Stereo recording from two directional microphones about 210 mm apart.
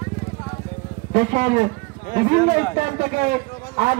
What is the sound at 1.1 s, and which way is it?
A man's voice, 40° right (ahead or behind).